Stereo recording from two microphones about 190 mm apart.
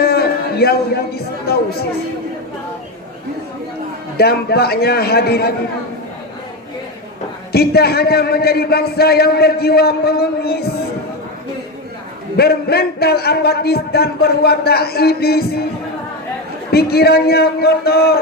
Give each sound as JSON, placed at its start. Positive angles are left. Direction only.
{"t": 0.0, "sound": "a sound", "side_deg": 55}
{"t": 4.2, "sound": "a man's voice", "side_deg": 55}
{"t": 7.5, "sound": "a man's voice", "side_deg": 55}
{"t": 12.4, "sound": "a man's voice", "side_deg": 55}
{"t": 16.7, "sound": "a man's voice", "side_deg": 55}